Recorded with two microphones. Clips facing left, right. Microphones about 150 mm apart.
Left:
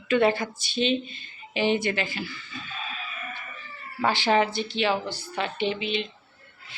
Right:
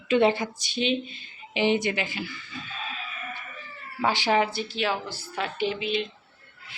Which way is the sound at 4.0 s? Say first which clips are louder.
Left 1 dB; 15° right (ahead or behind).